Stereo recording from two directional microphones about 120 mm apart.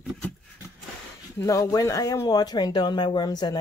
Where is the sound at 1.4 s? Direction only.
25° left (ahead or behind).